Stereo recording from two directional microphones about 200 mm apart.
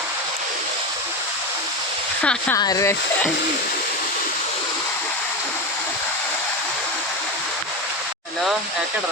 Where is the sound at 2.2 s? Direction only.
5° left (ahead or behind).